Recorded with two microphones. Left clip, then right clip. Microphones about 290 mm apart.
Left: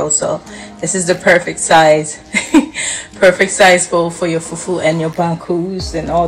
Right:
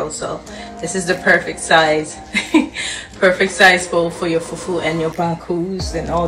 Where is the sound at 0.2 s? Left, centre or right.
Left.